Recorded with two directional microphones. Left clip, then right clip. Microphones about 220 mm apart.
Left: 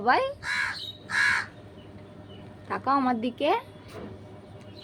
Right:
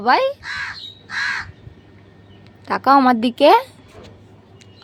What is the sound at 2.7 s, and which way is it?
A woman's voice, 40° right (ahead or behind).